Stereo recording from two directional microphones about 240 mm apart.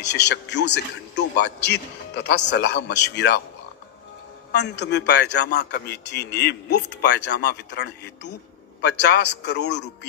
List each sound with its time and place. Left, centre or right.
0.0 s a man's voice: left
4.5 s a man's voice: left